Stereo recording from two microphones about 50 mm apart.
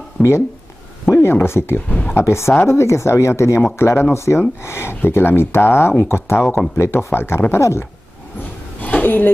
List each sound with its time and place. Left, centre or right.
0.2 s speech: centre
1.2 s speech: left
1.9 s speech: left
2.1 s speech: left
7.5 s speech: left
8.8 s a sound: left